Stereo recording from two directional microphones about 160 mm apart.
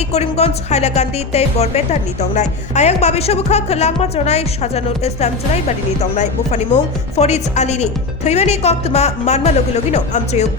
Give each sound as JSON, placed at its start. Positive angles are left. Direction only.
{"t": 0.1, "sound": "speech", "side_deg": 40}